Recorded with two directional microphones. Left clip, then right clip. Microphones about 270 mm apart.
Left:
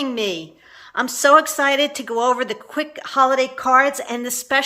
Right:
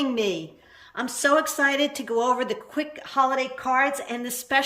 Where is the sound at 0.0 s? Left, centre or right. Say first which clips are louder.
Left 2 dB; centre.